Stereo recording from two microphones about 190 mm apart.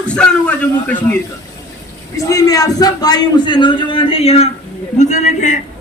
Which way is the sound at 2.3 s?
20° left (ahead or behind).